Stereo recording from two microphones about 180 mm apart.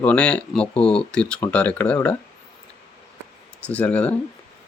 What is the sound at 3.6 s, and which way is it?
Speech, 5° left (ahead or behind).